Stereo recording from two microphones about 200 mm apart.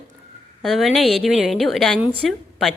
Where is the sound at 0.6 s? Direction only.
Centre (ahead or behind).